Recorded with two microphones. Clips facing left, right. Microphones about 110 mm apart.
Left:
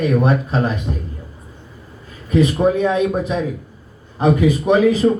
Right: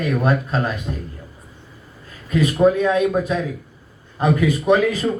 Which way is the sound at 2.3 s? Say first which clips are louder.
Left 1 dB; 20° left (ahead or behind).